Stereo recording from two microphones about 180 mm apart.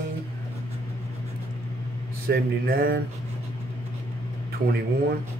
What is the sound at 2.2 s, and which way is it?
Mantra, 55° right (ahead or behind).